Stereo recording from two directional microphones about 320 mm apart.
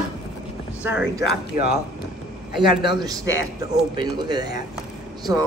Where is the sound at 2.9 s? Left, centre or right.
Centre.